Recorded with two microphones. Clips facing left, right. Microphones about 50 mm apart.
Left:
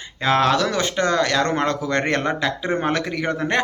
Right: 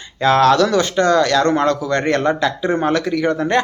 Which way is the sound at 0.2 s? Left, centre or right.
Centre.